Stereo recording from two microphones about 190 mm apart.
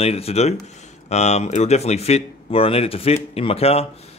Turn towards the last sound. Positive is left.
turn(degrees=30)  # may be behind; listen again after turning